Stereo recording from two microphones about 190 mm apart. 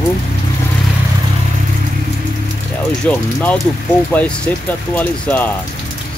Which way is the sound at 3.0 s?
10° left (ahead or behind).